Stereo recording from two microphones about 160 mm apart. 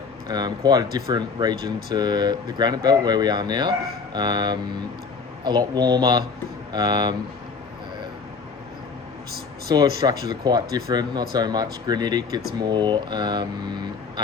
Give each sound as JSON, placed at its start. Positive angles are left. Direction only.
{"t": 0.3, "sound": "speech", "side_deg": -25}
{"t": 9.6, "sound": "speech", "side_deg": -25}